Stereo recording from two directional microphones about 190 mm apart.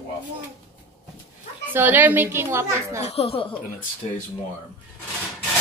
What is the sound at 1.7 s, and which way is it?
Speech, 10° right (ahead or behind).